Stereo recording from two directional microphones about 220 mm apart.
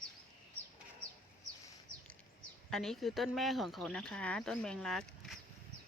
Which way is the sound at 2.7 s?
Centre (ahead or behind).